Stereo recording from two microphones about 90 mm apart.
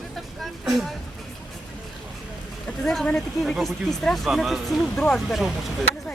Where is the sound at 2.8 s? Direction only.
5° left (ahead or behind).